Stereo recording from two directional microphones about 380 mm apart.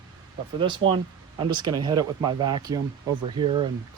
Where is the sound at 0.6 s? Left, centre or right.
Centre.